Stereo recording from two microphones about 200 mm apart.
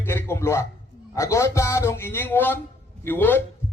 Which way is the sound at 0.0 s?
10° left (ahead or behind).